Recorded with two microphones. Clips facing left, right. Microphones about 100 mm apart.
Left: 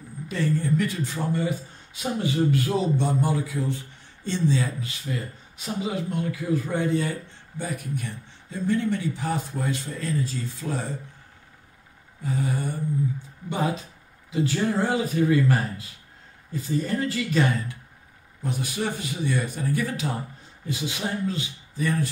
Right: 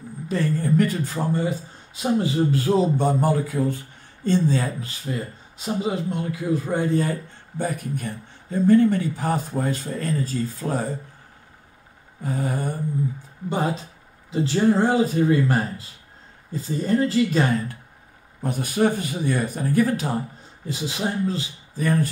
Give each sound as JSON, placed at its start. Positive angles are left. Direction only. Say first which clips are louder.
{"t": 0.3, "sound": "a man's voice", "louder": "right 3 dB", "side_deg": -40}
{"t": 4.8, "sound": "a man's voice", "louder": "right 2 dB", "side_deg": -30}
{"t": 12.2, "sound": "a man's voice", "louder": "right 1 dB", "side_deg": -45}
{"t": 14.3, "sound": "a man's voice", "louder": "right 5 dB", "side_deg": -30}
{"t": 18.4, "sound": "a man's voice", "louder": "right 7 dB", "side_deg": -50}
{"t": 20.6, "sound": "a man's voice", "louder": "right 3 dB", "side_deg": -30}